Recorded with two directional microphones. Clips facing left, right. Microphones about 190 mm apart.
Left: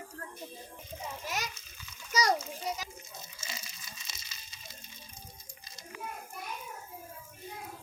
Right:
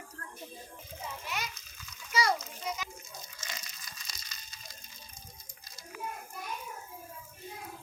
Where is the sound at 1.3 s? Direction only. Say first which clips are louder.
Left 2 dB; 40° left (ahead or behind).